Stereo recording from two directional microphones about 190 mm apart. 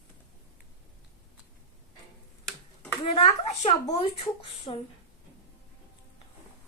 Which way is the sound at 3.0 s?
30° left (ahead or behind).